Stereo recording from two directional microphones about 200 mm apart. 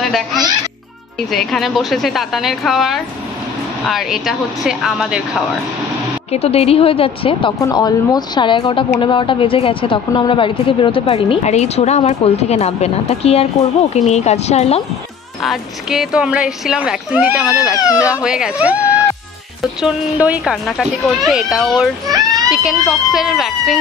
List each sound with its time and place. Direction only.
0.0 s speech: centre (ahead or behind)
6.3 s a woman's voice: 30° left (ahead or behind)
15.4 s speech: centre (ahead or behind)